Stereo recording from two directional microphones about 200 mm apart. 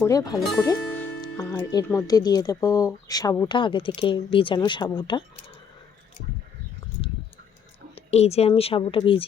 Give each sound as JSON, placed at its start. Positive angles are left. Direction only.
{"t": 0.0, "sound": "speech", "side_deg": 15}
{"t": 0.6, "sound": "music", "side_deg": 15}
{"t": 1.2, "sound": "speech", "side_deg": 20}
{"t": 7.9, "sound": "speech", "side_deg": 30}